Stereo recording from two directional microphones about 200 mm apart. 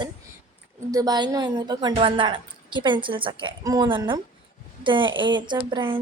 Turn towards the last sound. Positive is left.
turn(degrees=-25)  # may be behind; listen again after turning